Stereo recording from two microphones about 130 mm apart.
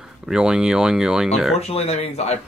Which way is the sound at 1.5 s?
55° left (ahead or behind).